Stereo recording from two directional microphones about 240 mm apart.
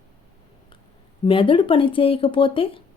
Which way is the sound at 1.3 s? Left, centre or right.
Left.